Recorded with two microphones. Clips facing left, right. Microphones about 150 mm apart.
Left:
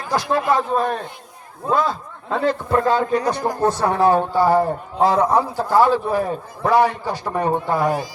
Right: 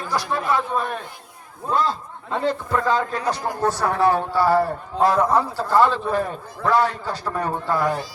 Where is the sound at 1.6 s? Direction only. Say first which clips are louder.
Left 2 dB; 90° left.